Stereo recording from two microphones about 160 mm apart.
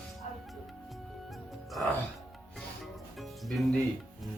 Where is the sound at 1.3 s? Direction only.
Centre (ahead or behind).